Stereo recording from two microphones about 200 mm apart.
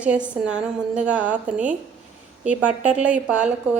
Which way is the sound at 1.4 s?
40° right (ahead or behind).